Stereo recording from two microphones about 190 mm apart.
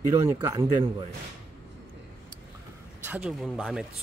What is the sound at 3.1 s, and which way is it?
Speech, 5° right (ahead or behind).